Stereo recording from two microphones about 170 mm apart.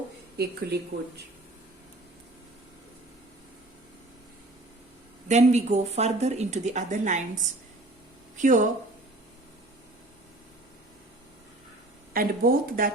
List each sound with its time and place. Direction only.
0.3 s speech: 70° right (ahead or behind)
5.3 s speech: 40° right (ahead or behind)
8.4 s speech: 45° right (ahead or behind)
12.1 s speech: 60° right (ahead or behind)